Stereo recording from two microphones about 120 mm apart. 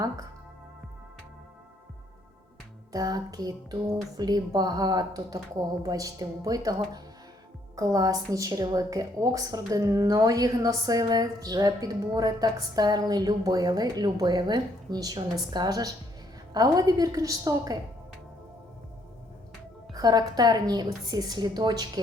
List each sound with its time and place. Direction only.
2.9 s a woman's voice: 30° right (ahead or behind)
19.9 s a woman's voice: 30° right (ahead or behind)